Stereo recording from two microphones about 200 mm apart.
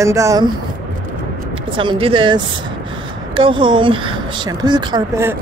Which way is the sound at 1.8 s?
25° right (ahead or behind).